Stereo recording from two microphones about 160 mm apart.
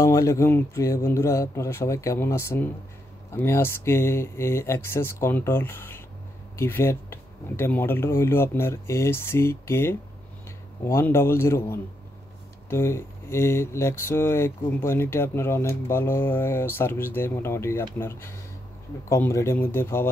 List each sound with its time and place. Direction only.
0.0 s speech: 20° left (ahead or behind)